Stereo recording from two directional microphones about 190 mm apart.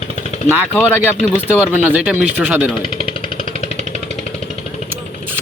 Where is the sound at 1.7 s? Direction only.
10° right (ahead or behind).